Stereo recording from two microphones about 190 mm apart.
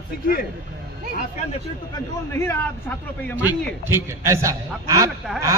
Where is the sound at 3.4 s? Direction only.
10° right (ahead or behind).